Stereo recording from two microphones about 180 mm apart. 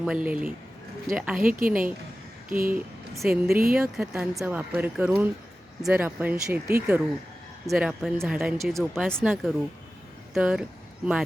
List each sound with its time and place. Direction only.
0.0 s speech: 5° right (ahead or behind)
1.4 s speech: 50° right (ahead or behind)
2.7 s a woman's voice: centre (ahead or behind)
3.5 s speech: 55° right (ahead or behind)
3.8 s speech: 5° right (ahead or behind)
7.7 s speech: centre (ahead or behind)